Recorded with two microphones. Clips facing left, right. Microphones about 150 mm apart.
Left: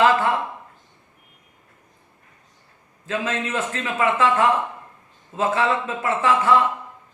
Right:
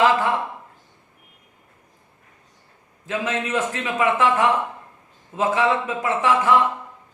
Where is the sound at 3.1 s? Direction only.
15° right (ahead or behind).